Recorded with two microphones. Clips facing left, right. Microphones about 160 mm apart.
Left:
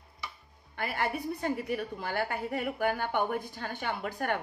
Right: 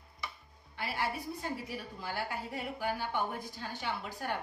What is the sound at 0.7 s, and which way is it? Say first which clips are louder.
A woman's voice: left 4 dB; 55° left (ahead or behind).